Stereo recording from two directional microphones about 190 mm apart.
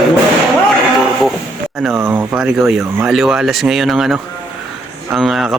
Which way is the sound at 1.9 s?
10° right (ahead or behind).